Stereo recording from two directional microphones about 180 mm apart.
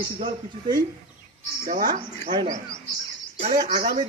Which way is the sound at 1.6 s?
55° right (ahead or behind).